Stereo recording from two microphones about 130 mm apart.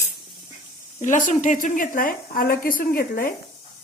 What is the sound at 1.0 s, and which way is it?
A woman's voice, 75° left (ahead or behind).